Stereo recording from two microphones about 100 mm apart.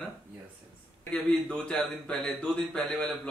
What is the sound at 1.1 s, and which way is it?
A man's voice, 10° left (ahead or behind).